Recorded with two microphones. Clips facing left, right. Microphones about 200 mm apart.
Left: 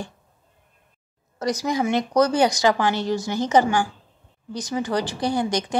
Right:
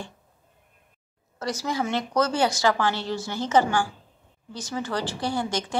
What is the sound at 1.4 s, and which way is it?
A woman's voice, 15° left (ahead or behind).